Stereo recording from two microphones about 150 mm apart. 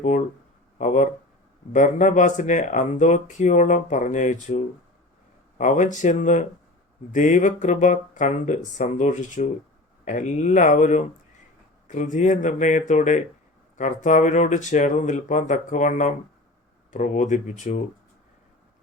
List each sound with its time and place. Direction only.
0.8 s speech: 55° left (ahead or behind)